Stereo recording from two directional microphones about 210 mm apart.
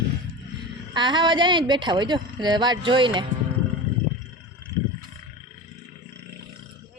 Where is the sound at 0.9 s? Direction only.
20° right (ahead or behind).